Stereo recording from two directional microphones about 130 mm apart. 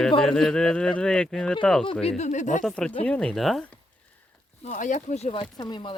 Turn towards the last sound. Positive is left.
turn(degrees=35)  # may be behind; listen again after turning